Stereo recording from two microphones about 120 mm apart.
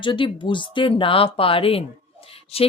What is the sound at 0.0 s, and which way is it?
A woman's voice, 45° left (ahead or behind).